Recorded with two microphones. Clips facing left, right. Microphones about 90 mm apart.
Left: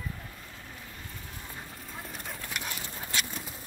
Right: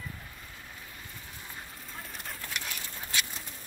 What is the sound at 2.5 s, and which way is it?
Dog, 20° left (ahead or behind).